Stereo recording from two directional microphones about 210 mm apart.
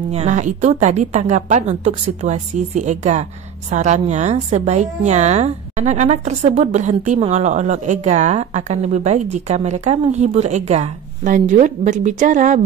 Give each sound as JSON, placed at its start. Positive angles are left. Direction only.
{"t": 0.1, "sound": "a woman's voice", "side_deg": -35}